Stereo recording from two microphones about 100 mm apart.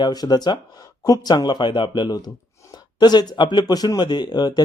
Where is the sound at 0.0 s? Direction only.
40° left (ahead or behind).